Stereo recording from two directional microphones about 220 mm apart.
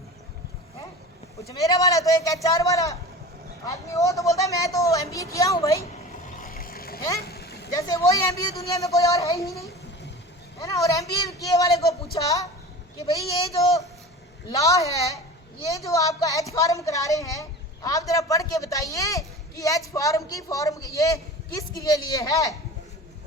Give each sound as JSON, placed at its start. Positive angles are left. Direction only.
{"t": 1.5, "sound": "a man's voice", "side_deg": 15}
{"t": 6.4, "sound": "vehicle", "side_deg": 40}
{"t": 7.8, "sound": "a man's voice", "side_deg": 15}